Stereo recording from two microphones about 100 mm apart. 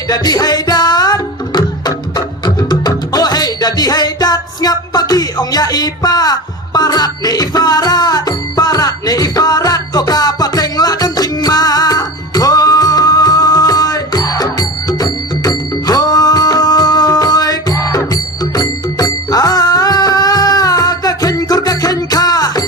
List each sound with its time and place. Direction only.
0.1 s music: 40° left (ahead or behind)